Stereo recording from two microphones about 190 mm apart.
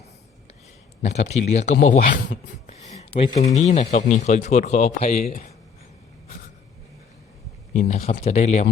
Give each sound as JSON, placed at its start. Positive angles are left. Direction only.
{"t": 1.0, "sound": "speech", "side_deg": 35}
{"t": 7.7, "sound": "speech", "side_deg": 45}